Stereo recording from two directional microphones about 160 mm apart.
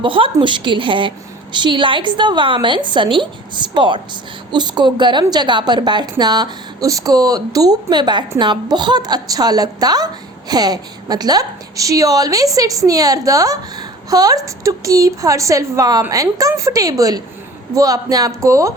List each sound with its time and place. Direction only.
0.0 s a woman's voice: 30° right (ahead or behind)